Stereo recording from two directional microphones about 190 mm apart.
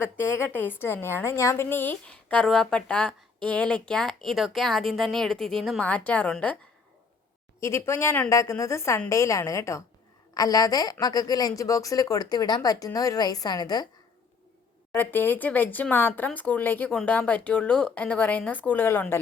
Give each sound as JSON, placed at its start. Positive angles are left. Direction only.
{"t": 0.0, "sound": "a woman's voice", "side_deg": 10}
{"t": 7.6, "sound": "speech", "side_deg": 15}
{"t": 14.9, "sound": "speech", "side_deg": 10}